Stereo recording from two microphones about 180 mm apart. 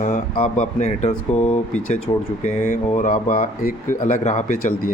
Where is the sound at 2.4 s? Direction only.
40° left (ahead or behind).